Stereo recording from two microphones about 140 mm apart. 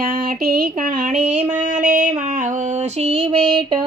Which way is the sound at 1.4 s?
65° right (ahead or behind).